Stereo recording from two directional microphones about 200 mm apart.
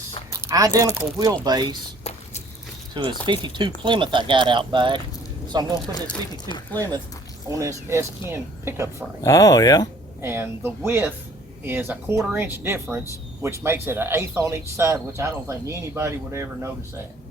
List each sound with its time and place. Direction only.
0.4 s speech: 15° right (ahead or behind)
2.0 s walk: 30° left (ahead or behind)
2.9 s speech: 25° right (ahead or behind)
5.9 s speech: 20° left (ahead or behind)
6.7 s speech: 15° right (ahead or behind)
9.2 s speech: 15° left (ahead or behind)
10.2 s speech: 10° right (ahead or behind)